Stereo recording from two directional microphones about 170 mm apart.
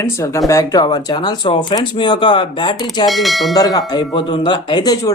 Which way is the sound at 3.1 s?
Centre (ahead or behind).